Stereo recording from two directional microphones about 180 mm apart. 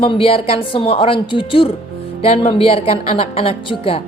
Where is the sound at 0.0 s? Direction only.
30° left (ahead or behind).